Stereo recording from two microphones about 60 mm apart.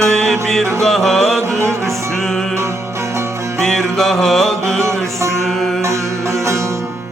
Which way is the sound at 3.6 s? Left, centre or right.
Centre.